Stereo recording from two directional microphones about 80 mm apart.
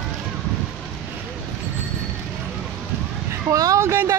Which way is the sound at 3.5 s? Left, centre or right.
Right.